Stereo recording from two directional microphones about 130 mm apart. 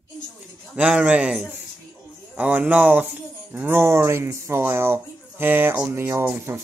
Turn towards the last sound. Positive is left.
turn(degrees=-15)  # may be behind; listen again after turning